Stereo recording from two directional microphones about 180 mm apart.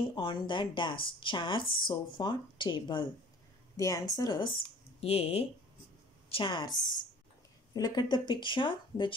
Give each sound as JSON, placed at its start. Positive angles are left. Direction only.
{"t": 0.1, "sound": "a woman's voice", "side_deg": 25}